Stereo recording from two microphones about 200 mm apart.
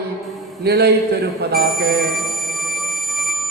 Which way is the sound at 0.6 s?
55° right (ahead or behind).